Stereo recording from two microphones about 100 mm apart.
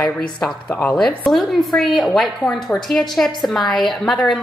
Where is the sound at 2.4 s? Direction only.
15° left (ahead or behind).